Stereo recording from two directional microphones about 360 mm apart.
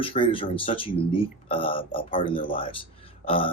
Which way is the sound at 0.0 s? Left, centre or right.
Centre.